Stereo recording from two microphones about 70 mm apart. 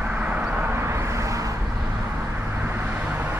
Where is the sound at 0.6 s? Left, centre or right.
Right.